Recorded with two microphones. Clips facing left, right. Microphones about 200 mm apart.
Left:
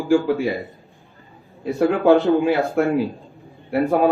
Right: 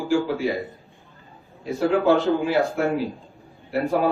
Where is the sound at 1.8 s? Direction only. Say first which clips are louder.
Left 4 dB; 55° left (ahead or behind).